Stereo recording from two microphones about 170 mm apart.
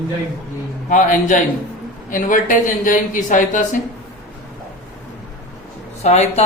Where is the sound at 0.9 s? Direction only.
50° left (ahead or behind).